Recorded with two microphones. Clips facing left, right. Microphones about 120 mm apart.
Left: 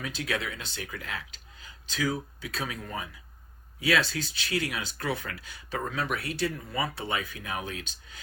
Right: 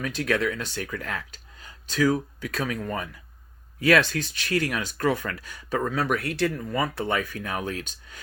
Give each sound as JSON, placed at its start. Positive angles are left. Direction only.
{"t": 0.0, "sound": "speech", "side_deg": -55}